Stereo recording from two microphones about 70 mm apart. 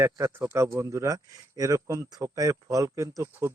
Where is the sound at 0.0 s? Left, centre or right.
Right.